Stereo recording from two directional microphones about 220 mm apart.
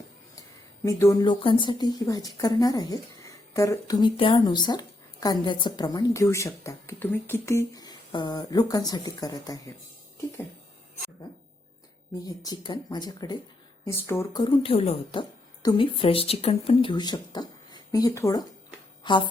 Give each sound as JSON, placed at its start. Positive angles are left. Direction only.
{"t": 0.9, "sound": "a woman's voice", "side_deg": 15}
{"t": 12.2, "sound": "a woman's voice", "side_deg": 20}